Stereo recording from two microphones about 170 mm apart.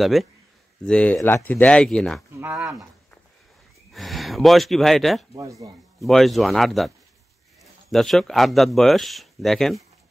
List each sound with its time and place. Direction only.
0.0 s speech: centre (ahead or behind)
2.4 s speech: 5° right (ahead or behind)
3.9 s speech: centre (ahead or behind)
5.3 s speech: 20° right (ahead or behind)
5.9 s speech: centre (ahead or behind)
7.9 s speech: centre (ahead or behind)